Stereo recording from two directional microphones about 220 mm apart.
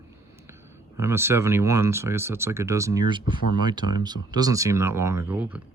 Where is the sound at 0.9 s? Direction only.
10° right (ahead or behind).